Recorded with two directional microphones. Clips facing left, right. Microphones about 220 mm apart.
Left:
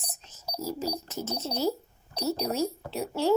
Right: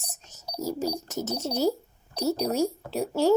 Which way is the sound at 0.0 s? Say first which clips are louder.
Left 1 dB; 45° right (ahead or behind).